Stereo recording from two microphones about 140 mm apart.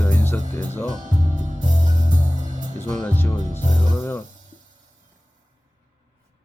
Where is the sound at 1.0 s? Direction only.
65° right (ahead or behind).